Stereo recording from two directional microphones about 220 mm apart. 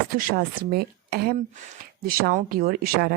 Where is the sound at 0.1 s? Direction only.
40° right (ahead or behind).